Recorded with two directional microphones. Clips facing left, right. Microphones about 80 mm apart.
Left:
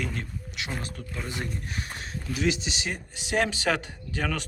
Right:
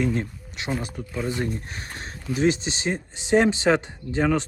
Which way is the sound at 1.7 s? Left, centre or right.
Right.